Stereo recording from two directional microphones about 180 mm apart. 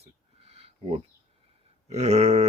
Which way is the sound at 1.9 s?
35° right (ahead or behind).